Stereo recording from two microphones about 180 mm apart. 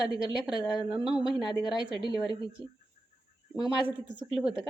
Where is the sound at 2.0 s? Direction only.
25° left (ahead or behind).